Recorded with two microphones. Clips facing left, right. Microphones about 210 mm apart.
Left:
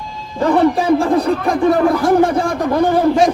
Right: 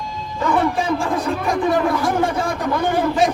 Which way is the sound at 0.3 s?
35° left (ahead or behind).